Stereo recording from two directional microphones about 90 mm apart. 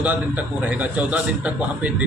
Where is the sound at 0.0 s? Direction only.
15° right (ahead or behind).